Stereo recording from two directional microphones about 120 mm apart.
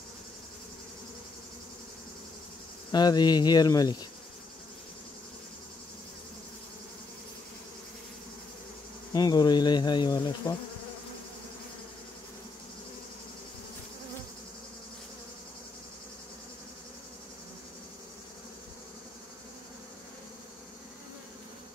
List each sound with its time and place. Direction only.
2.9 s speech: 35° left (ahead or behind)
9.1 s speech: 35° left (ahead or behind)